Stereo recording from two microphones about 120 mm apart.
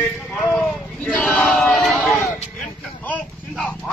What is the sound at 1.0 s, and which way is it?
Male singing, 10° left (ahead or behind).